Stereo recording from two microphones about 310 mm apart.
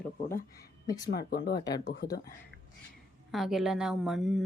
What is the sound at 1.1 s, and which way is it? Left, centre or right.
Speech, left.